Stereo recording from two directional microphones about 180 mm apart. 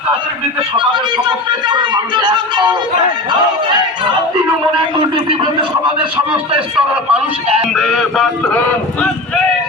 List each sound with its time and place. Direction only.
0.8 s a sound: 25° right (ahead or behind)
5.1 s a man's voice: 25° right (ahead or behind)
7.1 s speech: centre (ahead or behind)